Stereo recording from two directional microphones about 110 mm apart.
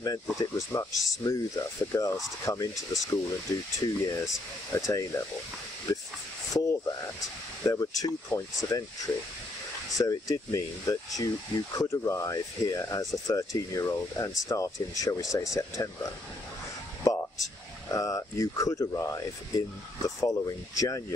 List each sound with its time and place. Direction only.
0.0 s speech: 35° left (ahead or behind)
2.7 s speech: centre (ahead or behind)
3.1 s speech: 30° left (ahead or behind)
7.6 s speech: 30° left (ahead or behind)